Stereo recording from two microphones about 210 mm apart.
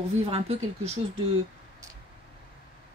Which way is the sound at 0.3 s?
30° right (ahead or behind).